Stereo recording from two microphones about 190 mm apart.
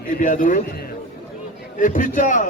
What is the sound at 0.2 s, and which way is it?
Speech, 45° left (ahead or behind).